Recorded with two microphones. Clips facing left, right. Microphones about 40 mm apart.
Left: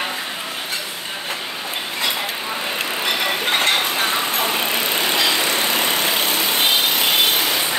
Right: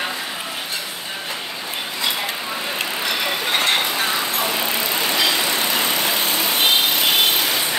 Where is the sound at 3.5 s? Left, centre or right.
Left.